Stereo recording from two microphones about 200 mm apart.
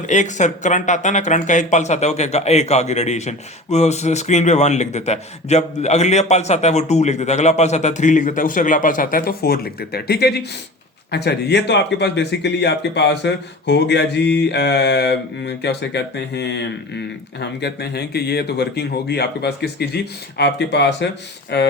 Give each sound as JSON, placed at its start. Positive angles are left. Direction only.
{"t": 0.1, "sound": "speech", "side_deg": 35}